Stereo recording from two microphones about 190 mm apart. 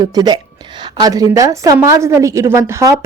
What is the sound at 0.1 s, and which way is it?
Speech, 20° right (ahead or behind).